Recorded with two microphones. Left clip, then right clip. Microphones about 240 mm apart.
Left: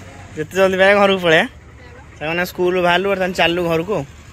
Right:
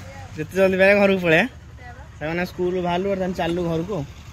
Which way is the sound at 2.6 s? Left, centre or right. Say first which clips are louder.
Left 9 dB; left.